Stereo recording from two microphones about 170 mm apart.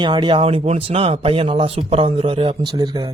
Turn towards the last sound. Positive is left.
turn(degrees=-25)  # may be behind; listen again after turning